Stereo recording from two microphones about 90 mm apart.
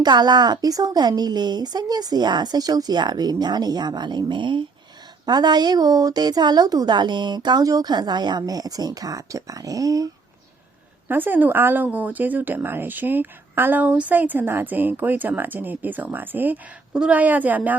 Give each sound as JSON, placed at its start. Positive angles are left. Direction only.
{"t": 0.0, "sound": "a woman's voice", "side_deg": -50}
{"t": 5.2, "sound": "a woman's voice", "side_deg": -50}
{"t": 11.1, "sound": "a woman's voice", "side_deg": -20}